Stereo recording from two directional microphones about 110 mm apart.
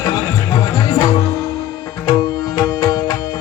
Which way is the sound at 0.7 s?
35° left (ahead or behind).